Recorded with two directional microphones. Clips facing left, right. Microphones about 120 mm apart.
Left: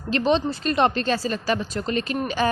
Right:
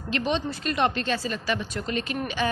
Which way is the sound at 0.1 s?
30° left (ahead or behind).